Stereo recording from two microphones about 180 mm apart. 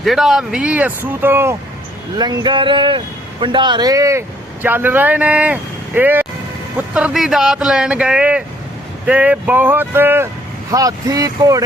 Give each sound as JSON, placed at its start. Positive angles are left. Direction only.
{"t": 0.0, "sound": "speech", "side_deg": 0}
{"t": 2.1, "sound": "speech", "side_deg": -25}